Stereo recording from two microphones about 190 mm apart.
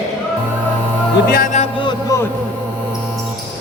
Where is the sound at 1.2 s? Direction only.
50° left (ahead or behind).